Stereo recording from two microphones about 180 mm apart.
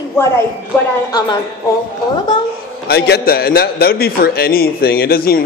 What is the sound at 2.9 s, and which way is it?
A man's voice, 60° left (ahead or behind).